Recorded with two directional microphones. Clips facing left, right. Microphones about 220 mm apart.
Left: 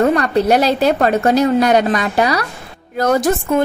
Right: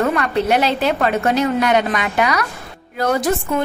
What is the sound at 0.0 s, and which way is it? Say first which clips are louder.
A woman's voice: left 4 dB; 35° left (ahead or behind).